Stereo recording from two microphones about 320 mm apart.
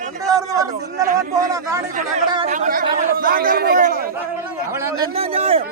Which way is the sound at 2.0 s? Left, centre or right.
Centre.